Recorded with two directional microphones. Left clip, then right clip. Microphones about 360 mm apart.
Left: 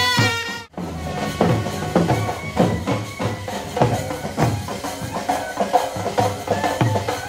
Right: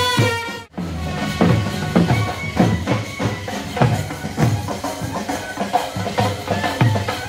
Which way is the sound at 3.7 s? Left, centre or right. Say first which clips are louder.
Left 1 dB; left.